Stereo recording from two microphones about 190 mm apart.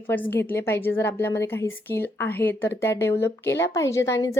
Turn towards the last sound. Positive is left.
turn(degrees=15)  # may be behind; listen again after turning